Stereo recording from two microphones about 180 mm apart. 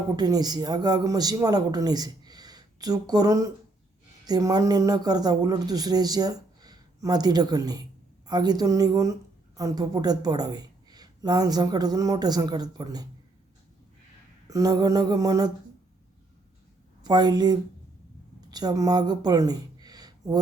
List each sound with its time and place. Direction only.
0.2 s speech: 20° right (ahead or behind)
14.5 s speech: 20° right (ahead or behind)
17.0 s speech: 25° right (ahead or behind)